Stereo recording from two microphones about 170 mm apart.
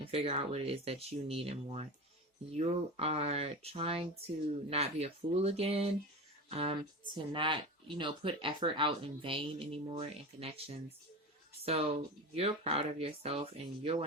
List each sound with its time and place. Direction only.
0.0 s speech: 35° right (ahead or behind)